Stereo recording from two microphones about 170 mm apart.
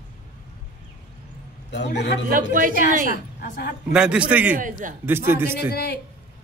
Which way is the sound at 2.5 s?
50° right (ahead or behind).